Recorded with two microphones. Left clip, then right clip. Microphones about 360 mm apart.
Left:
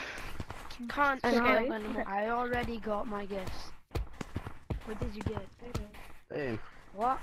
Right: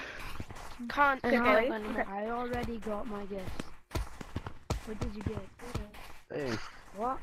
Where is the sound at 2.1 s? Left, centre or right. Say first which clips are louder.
Left 4 dB; centre.